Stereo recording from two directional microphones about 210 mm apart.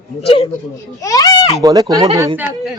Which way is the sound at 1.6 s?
15° right (ahead or behind).